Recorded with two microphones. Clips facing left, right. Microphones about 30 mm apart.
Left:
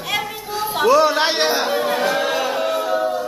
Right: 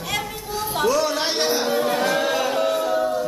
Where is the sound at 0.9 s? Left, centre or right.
Left.